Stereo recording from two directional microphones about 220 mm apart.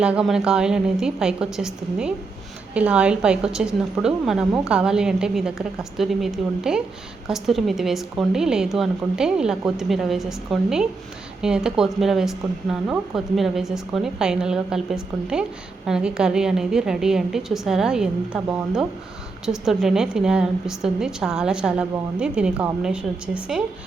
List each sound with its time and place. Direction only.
0.0 s a woman's voice: 5° right (ahead or behind)